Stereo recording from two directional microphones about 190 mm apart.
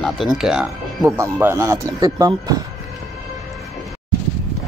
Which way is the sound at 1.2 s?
15° right (ahead or behind).